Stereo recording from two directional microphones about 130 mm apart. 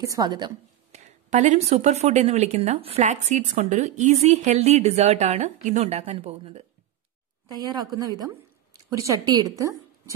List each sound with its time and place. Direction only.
0.0 s a woman's voice: 30° right (ahead or behind)
0.9 s speech: 65° right (ahead or behind)
7.5 s a woman's voice: 30° right (ahead or behind)